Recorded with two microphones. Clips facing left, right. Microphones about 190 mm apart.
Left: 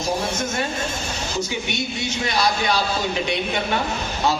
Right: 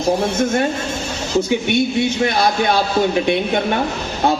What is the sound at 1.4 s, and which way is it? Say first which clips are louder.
Speech: right 11 dB; 55° right (ahead or behind).